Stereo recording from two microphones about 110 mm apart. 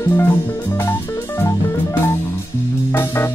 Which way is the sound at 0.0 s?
20° left (ahead or behind).